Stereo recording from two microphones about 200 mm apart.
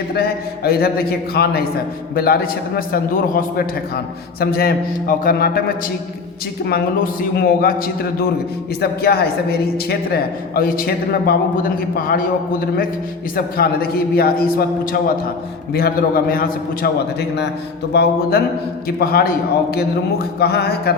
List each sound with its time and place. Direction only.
0.1 s a man's voice: 50° left (ahead or behind)
15.7 s a man's voice: 50° left (ahead or behind)